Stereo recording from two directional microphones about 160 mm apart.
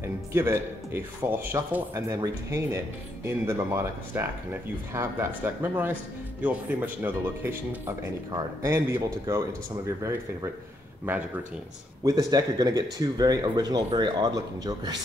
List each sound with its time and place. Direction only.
0.0 s speech: 15° right (ahead or behind)
12.0 s speech: 20° right (ahead or behind)